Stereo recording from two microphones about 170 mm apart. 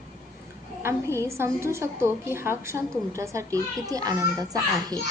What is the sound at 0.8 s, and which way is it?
A woman's voice, 15° right (ahead or behind).